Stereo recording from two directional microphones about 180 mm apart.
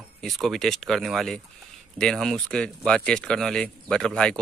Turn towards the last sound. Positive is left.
turn(degrees=5)  # may be behind; listen again after turning